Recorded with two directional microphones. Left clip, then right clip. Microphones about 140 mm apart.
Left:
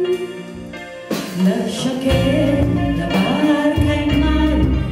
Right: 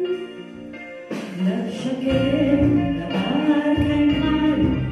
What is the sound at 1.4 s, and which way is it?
Music, 35° left (ahead or behind).